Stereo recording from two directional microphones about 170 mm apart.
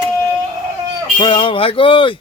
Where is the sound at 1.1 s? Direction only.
30° left (ahead or behind).